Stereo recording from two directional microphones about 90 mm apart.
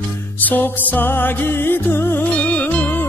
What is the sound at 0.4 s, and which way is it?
Music, 20° left (ahead or behind).